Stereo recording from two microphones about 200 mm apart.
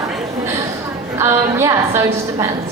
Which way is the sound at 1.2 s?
15° right (ahead or behind).